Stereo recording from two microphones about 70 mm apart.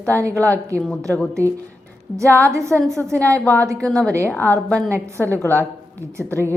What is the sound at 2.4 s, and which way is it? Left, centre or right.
A woman's voice, right.